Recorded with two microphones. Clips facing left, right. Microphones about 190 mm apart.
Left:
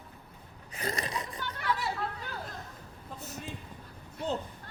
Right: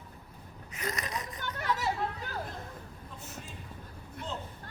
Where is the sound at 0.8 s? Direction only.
30° left (ahead or behind).